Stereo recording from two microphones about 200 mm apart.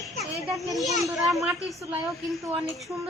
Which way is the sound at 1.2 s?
Centre (ahead or behind).